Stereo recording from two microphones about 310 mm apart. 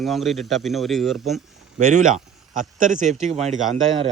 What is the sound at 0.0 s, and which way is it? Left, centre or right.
A man's voice, centre.